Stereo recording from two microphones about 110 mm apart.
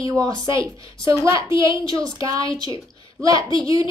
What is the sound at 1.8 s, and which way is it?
A woman's voice, 35° right (ahead or behind).